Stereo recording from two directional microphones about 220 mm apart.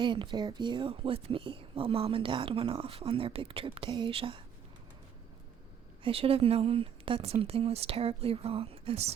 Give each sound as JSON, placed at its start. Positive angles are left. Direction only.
{"t": 0.0, "sound": "speech", "side_deg": -20}
{"t": 6.0, "sound": "speech", "side_deg": -25}